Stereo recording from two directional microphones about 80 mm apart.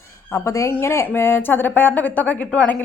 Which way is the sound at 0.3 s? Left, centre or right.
Left.